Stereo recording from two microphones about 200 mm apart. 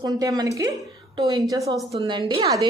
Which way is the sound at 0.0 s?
20° right (ahead or behind).